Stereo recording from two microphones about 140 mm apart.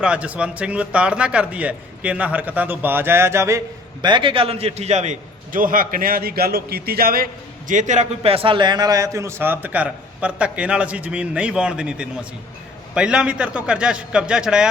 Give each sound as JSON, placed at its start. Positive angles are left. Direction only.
{"t": 0.0, "sound": "a man's voice", "side_deg": -10}
{"t": 4.0, "sound": "a man's voice", "side_deg": -35}
{"t": 7.7, "sound": "a man's voice", "side_deg": -60}
{"t": 8.3, "sound": "a man's voice", "side_deg": -40}